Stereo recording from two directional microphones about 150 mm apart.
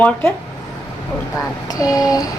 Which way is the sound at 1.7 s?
25° left (ahead or behind).